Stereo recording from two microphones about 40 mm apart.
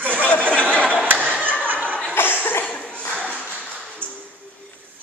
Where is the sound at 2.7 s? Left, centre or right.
Left.